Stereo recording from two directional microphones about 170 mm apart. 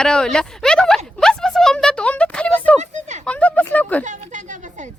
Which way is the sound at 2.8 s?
45° right (ahead or behind).